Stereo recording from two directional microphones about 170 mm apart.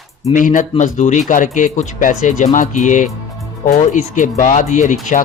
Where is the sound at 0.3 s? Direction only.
50° left (ahead or behind).